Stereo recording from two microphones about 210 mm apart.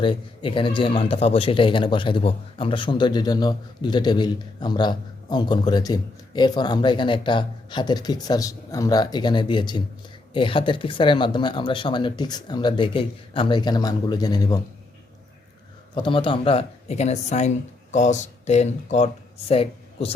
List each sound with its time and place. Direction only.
0.0 s speech: 25° left (ahead or behind)
16.0 s speech: 25° left (ahead or behind)